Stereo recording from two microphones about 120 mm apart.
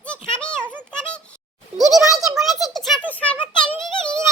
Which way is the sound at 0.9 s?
10° left (ahead or behind).